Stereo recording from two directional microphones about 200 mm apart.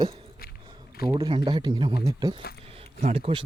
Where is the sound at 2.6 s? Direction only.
30° right (ahead or behind).